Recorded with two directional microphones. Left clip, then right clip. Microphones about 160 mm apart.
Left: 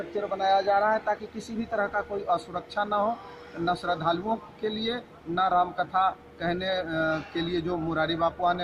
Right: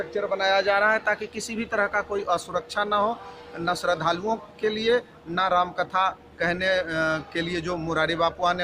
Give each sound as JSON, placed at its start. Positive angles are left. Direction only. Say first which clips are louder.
{"t": 0.2, "sound": "a man's voice", "louder": "right 2 dB", "side_deg": -15}